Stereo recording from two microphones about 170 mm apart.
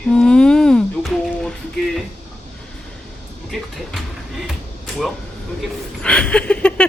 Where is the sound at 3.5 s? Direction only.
Centre (ahead or behind).